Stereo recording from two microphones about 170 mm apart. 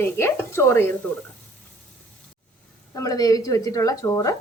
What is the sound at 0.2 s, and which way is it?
Speech, 15° left (ahead or behind).